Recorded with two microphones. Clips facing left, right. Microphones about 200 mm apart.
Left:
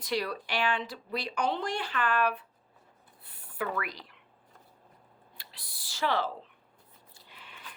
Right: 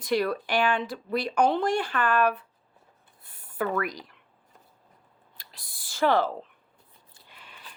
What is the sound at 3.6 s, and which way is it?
Speech, 45° right (ahead or behind).